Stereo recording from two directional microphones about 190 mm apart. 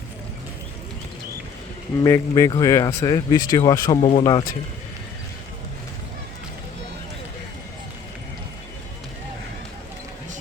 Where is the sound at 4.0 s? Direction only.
30° left (ahead or behind).